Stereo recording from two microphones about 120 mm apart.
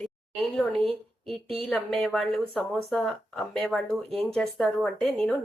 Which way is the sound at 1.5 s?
5° left (ahead or behind).